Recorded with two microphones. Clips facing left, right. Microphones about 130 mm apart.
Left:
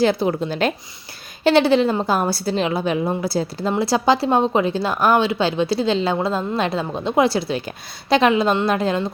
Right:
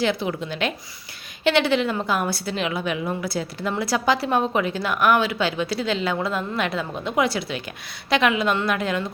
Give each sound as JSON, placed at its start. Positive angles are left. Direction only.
{"t": 0.0, "sound": "a woman's voice", "side_deg": 35}